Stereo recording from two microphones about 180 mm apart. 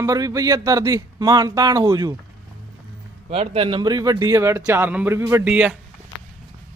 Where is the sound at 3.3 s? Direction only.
30° right (ahead or behind); by 5.7 s 10° right (ahead or behind).